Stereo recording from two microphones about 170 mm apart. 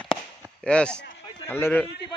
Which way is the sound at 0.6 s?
5° left (ahead or behind).